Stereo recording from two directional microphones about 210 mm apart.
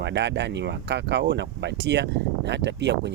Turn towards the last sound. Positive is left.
turn(degrees=-55)  # may be behind; listen again after turning